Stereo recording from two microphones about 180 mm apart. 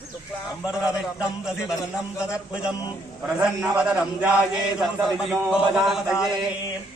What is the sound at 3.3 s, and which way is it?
Speech, 5° right (ahead or behind).